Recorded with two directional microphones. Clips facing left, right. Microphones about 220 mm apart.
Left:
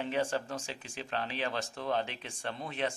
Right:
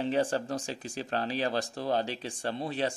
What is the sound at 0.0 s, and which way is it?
Speech, 35° right (ahead or behind).